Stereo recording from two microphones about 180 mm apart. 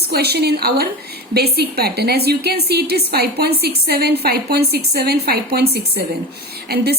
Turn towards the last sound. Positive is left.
turn(degrees=-60)  # may be behind; listen again after turning